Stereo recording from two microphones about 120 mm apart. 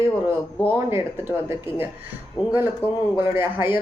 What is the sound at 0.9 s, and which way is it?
Speech, 20° right (ahead or behind).